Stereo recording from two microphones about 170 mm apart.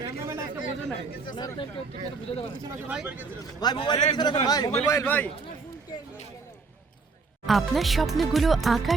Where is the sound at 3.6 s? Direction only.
25° left (ahead or behind).